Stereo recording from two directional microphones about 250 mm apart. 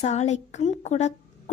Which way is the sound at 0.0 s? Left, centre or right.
Left.